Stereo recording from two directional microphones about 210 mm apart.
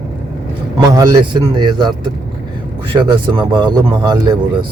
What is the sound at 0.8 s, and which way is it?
Speech, 15° right (ahead or behind).